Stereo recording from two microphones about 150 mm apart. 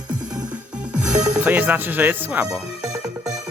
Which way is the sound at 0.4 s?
10° right (ahead or behind).